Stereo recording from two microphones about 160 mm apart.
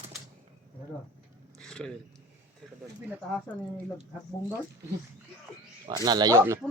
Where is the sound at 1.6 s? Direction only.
5° left (ahead or behind).